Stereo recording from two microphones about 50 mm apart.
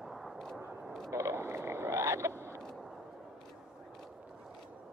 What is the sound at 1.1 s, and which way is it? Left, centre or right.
Frog, right.